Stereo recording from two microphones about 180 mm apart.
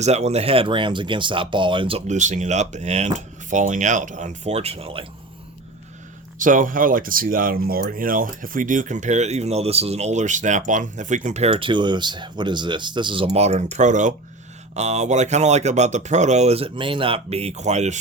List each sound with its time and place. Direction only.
0.0 s speech: 35° right (ahead or behind)
6.4 s speech: 50° right (ahead or behind)